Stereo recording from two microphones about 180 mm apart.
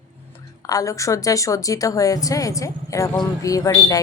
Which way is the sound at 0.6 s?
20° left (ahead or behind).